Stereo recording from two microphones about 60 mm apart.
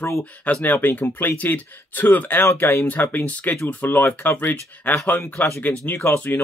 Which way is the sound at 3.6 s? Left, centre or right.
Left.